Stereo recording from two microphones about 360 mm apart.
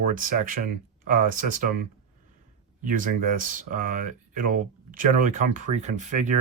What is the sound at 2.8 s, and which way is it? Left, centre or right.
Speech, right.